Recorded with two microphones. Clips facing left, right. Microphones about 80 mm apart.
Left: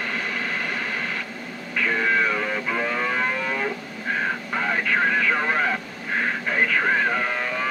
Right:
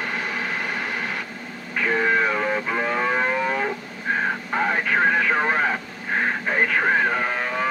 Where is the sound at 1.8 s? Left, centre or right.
Right.